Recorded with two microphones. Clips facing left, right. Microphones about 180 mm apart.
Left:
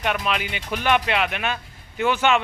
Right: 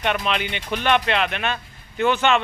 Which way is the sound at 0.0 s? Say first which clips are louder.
Right 1 dB; 5° left (ahead or behind).